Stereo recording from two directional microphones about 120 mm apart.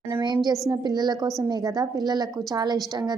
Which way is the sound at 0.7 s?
35° right (ahead or behind).